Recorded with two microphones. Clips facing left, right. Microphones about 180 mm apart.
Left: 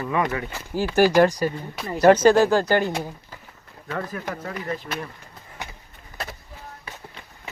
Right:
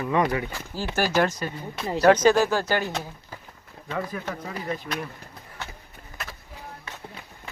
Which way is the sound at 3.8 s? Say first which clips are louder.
Left 1 dB; 5° left (ahead or behind).